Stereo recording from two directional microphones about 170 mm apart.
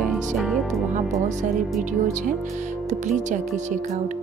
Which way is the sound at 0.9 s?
45° right (ahead or behind).